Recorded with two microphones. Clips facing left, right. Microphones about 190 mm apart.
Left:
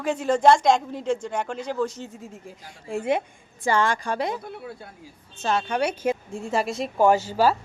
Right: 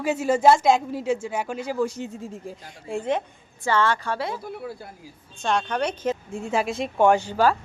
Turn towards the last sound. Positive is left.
turn(degrees=5)  # may be behind; listen again after turning